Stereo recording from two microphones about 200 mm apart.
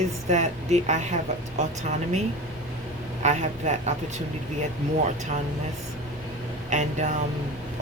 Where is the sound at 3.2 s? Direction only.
35° right (ahead or behind).